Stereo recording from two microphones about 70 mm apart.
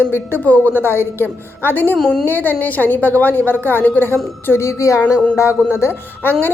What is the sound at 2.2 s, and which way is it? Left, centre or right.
A woman's voice, left.